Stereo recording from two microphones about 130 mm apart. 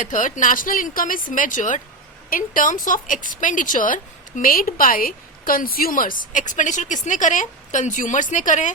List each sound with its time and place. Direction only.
0.0 s speech: 80° left
2.3 s speech: 90° left; by 8.7 s 75° left (ahead or behind)